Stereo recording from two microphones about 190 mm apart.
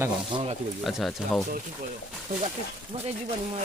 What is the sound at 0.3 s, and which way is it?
Speech, 25° right (ahead or behind).